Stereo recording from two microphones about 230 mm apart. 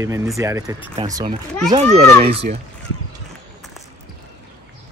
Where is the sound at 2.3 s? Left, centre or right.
Right.